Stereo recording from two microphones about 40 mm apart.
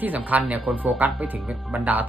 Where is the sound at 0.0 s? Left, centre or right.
Right.